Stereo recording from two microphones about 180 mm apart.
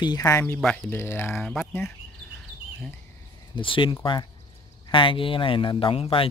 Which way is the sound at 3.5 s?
30° left (ahead or behind).